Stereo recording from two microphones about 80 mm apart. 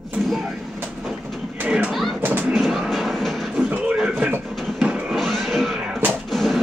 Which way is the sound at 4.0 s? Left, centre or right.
Centre.